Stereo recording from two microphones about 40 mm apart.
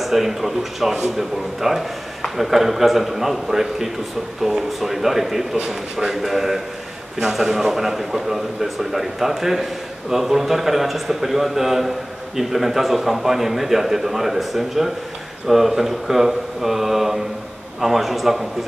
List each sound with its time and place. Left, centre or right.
0.0 s a man's voice: centre